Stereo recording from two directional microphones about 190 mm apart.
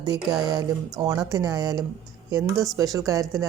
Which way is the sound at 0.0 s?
20° right (ahead or behind).